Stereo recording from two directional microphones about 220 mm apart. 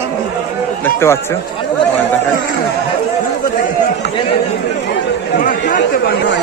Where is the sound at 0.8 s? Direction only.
10° left (ahead or behind).